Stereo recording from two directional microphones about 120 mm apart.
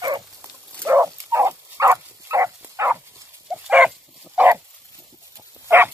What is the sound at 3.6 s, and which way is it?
Dog, 10° right (ahead or behind).